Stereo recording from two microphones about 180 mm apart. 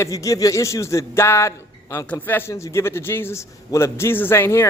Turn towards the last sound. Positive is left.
turn(degrees=15)  # may be behind; listen again after turning